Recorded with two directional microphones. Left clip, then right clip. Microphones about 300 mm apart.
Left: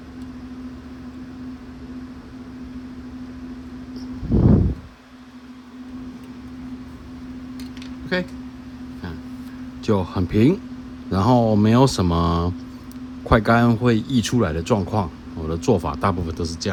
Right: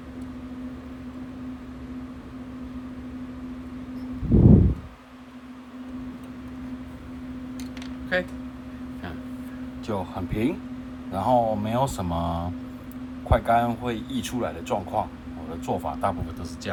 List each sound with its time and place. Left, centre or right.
4.4 s a sound: right
8.1 s mantra: centre
9.8 s mantra: left
13.3 s speech: left
15.6 s mantra: left